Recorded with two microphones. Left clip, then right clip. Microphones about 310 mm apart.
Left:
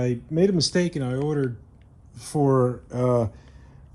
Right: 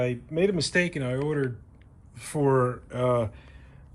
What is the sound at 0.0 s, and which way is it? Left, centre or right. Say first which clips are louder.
Speech: left 3 dB; left.